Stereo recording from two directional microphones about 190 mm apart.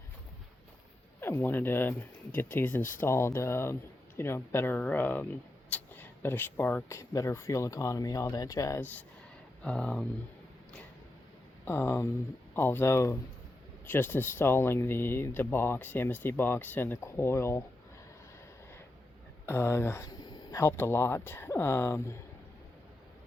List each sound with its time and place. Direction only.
1.2 s speech: 10° left (ahead or behind)
9.6 s speech: 5° left (ahead or behind)
11.6 s speech: 10° left (ahead or behind)
19.5 s speech: 15° left (ahead or behind)